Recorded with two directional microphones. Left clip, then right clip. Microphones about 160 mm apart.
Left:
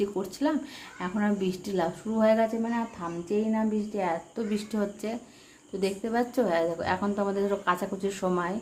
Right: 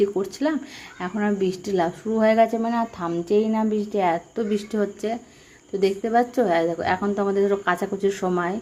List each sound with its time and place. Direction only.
0.0 s speech: 15° right (ahead or behind)